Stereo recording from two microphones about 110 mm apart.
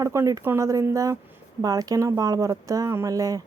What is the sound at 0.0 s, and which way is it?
A woman's voice, 30° right (ahead or behind).